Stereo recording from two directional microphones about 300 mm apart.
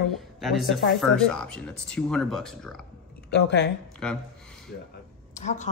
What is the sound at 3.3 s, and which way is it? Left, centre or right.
Speech, left.